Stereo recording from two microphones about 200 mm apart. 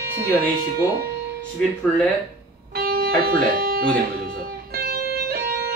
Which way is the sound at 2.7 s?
50° right (ahead or behind).